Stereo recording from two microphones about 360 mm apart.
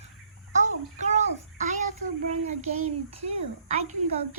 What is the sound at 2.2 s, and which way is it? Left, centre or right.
Speech, centre.